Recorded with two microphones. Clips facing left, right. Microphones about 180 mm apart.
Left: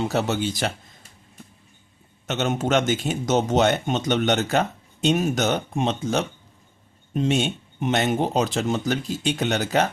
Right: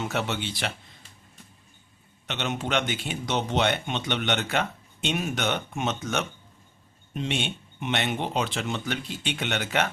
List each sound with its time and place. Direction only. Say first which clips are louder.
0.0 s speech: left 6 dB; 35° left (ahead or behind)
2.2 s speech: left 7 dB; 45° left (ahead or behind)